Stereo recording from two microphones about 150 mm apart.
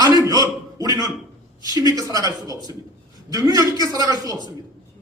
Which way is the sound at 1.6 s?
25° right (ahead or behind).